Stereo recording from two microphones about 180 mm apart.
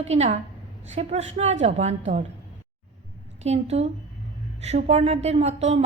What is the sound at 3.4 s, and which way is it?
A woman's voice, 35° right (ahead or behind).